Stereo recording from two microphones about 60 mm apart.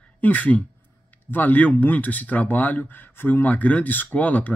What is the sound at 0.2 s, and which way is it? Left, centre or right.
Speech, left.